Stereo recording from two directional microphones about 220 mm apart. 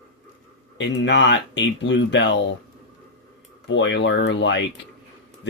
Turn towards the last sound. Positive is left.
turn(degrees=55)  # may be behind; listen again after turning